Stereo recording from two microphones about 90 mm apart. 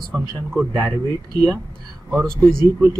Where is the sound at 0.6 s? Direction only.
25° right (ahead or behind).